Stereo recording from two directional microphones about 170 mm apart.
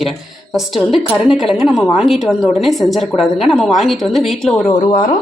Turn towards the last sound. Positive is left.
turn(degrees=25)  # may be behind; listen again after turning